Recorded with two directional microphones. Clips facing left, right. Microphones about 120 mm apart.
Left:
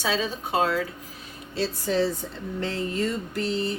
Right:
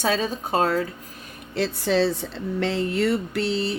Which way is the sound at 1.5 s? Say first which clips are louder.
Right 3 dB; 70° right (ahead or behind).